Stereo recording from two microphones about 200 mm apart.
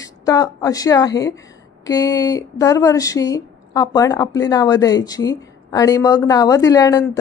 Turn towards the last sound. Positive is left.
turn(degrees=15)  # may be behind; listen again after turning